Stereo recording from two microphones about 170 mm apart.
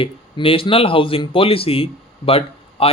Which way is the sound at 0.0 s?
30° left (ahead or behind).